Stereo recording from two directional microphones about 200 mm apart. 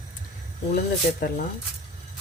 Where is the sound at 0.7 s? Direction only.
45° left (ahead or behind).